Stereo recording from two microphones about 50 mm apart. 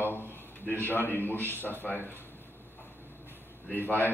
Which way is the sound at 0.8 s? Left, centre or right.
Left.